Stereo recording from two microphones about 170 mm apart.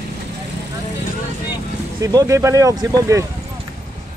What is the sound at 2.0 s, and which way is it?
Speech, 20° right (ahead or behind).